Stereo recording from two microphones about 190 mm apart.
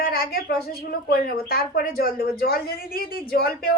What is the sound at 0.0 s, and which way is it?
Speech, 55° left (ahead or behind).